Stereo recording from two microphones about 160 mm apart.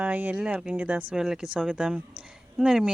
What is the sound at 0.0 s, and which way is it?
Speech, 10° right (ahead or behind).